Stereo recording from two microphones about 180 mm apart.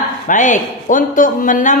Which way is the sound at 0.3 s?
45° left (ahead or behind).